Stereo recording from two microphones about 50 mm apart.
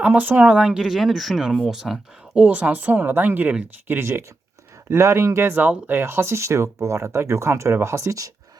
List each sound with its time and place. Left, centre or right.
0.0 s speech: right
0.5 s speech: centre
2.3 s speech: right
3.8 s speech: right
4.9 s speech: right
5.5 s speech: right